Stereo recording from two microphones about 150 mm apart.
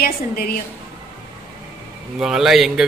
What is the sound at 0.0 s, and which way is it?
Speech, 85° left.